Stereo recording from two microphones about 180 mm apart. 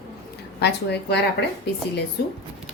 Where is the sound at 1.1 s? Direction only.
70° left (ahead or behind).